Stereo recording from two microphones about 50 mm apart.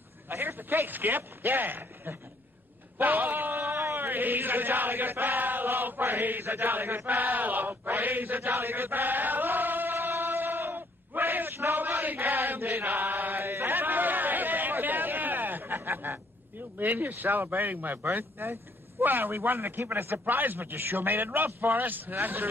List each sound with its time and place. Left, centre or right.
0.3 s speech: right
3.0 s a sound: right
3.9 s chant: right
7.1 s a man's voice: right
8.5 s chant: right
16.7 s a man's voice: right